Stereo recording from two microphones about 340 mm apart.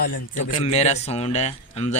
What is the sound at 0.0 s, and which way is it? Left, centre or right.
A man's voice, left.